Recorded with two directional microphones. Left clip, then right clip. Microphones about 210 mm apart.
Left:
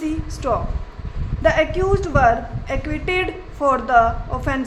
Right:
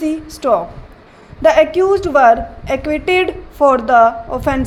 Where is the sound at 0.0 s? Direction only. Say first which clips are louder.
Right 6 dB; 20° right (ahead or behind).